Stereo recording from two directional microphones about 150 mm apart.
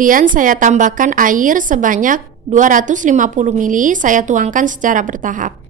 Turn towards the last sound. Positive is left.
turn(degrees=-60)  # may be behind; listen again after turning